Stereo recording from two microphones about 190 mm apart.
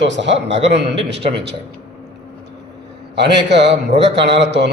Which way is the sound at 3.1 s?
65° right (ahead or behind).